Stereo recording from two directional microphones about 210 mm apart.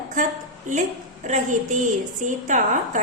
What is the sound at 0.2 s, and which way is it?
A woman's voice, 35° right (ahead or behind).